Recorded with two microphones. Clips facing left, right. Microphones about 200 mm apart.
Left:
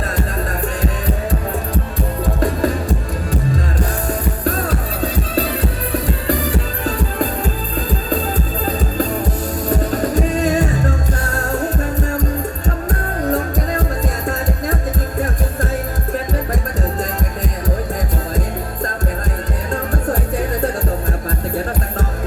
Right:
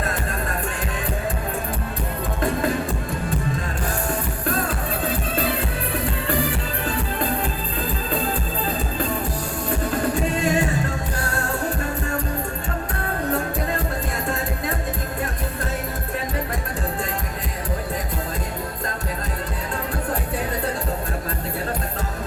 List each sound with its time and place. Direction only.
6.2 s music: 40° left (ahead or behind)
9.6 s music: 40° left (ahead or behind)